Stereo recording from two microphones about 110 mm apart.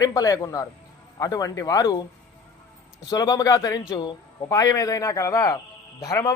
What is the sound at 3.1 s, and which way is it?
A man's voice, 35° left (ahead or behind).